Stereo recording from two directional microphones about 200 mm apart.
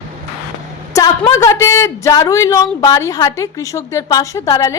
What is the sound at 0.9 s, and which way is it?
A woman's voice, 15° left (ahead or behind).